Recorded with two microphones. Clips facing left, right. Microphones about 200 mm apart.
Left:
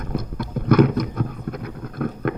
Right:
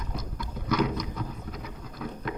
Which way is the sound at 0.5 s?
55° left (ahead or behind).